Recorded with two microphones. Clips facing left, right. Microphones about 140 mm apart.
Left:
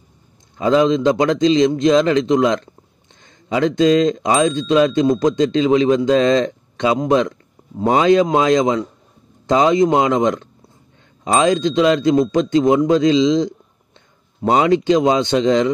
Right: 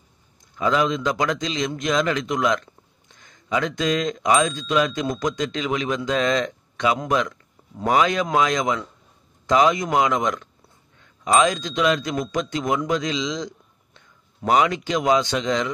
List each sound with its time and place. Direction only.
0.6 s speech: 30° left (ahead or behind)